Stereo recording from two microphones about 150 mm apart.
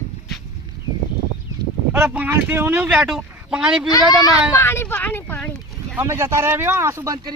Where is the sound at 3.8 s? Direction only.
25° left (ahead or behind).